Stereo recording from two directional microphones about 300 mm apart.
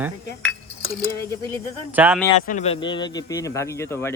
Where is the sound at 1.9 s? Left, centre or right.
Centre.